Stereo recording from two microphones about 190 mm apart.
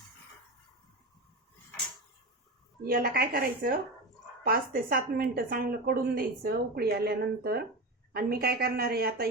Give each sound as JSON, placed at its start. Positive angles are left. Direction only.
{"t": 2.8, "sound": "a woman's voice", "side_deg": -50}